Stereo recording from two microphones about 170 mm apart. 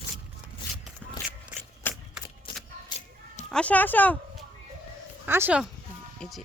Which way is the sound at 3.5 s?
5° left (ahead or behind).